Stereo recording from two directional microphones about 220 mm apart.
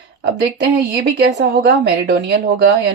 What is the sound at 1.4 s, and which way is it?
Speech, 45° right (ahead or behind).